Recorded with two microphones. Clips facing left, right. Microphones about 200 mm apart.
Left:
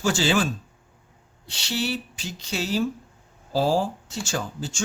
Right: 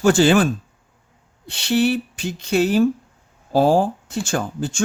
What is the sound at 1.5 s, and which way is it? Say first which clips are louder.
Speech: right 10 dB; 55° right (ahead or behind).